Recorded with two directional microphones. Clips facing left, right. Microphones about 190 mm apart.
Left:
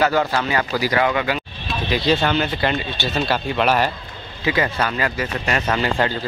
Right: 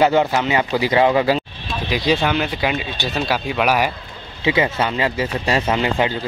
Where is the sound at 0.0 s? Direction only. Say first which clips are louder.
Right 3 dB; 20° right (ahead or behind).